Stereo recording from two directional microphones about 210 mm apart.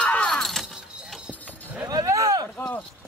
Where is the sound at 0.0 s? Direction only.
5° left (ahead or behind).